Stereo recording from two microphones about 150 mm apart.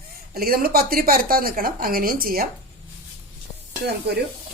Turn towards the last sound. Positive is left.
turn(degrees=-90)